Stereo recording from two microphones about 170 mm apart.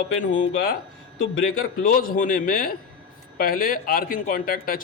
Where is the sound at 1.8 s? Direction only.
55° left (ahead or behind).